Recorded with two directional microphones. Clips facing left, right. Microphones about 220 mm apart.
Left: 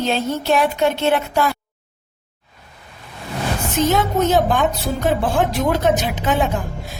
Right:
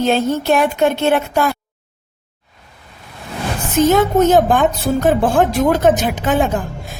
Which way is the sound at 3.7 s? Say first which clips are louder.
Right 6 dB; 50° right (ahead or behind).